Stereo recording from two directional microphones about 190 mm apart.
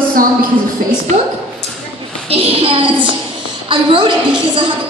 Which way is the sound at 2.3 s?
30° right (ahead or behind).